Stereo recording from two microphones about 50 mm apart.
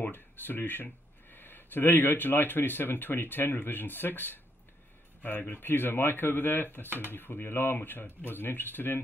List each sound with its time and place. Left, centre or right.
0.0 s speech: left